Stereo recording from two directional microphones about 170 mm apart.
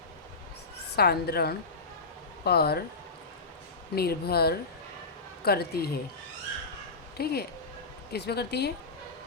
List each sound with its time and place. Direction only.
0.9 s speech: 65° left (ahead or behind)
3.9 s speech: 65° left (ahead or behind)
7.2 s speech: 65° left (ahead or behind)